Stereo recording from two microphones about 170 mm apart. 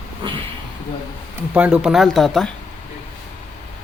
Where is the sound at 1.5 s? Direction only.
5° right (ahead or behind).